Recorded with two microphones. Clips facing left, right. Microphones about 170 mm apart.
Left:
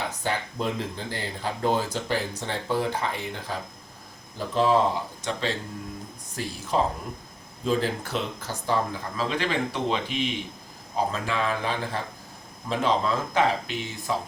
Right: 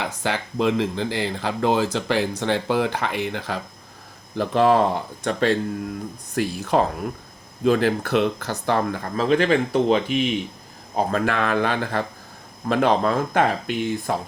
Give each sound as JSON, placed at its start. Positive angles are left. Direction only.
{"t": 0.0, "sound": "speech", "side_deg": -90}
{"t": 4.4, "sound": "speech", "side_deg": -65}
{"t": 10.9, "sound": "speech", "side_deg": -60}